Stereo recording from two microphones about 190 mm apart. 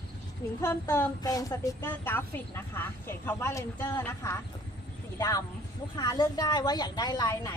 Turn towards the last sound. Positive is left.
turn(degrees=20)  # may be behind; listen again after turning